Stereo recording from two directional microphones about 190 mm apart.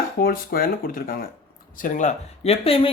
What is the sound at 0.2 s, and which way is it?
Speech, 50° left (ahead or behind).